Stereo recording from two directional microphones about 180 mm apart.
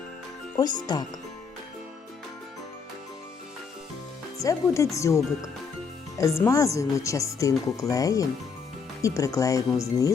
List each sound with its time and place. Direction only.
0.6 s speech: 25° left (ahead or behind)
4.4 s speech: 15° left (ahead or behind)